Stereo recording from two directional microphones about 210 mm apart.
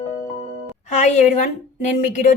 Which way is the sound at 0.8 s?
35° left (ahead or behind).